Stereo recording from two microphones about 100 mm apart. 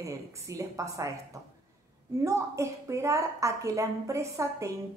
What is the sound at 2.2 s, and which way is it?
A woman's voice, 30° right (ahead or behind).